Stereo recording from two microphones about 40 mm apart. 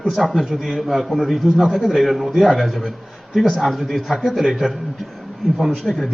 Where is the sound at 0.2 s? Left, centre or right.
Centre.